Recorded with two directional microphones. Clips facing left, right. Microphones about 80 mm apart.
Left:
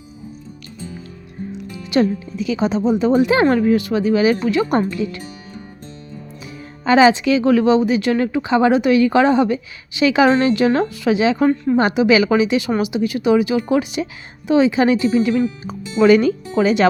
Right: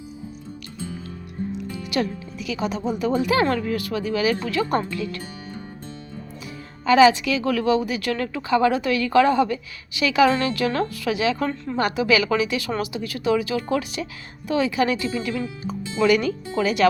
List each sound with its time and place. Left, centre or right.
1.9 s speech: left
6.8 s speech: left
11.4 s a woman's voice: centre